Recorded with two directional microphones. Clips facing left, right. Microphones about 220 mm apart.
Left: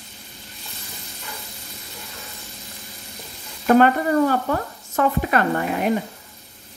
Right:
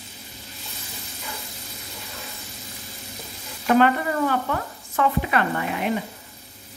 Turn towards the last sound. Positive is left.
turn(degrees=45)  # may be behind; listen again after turning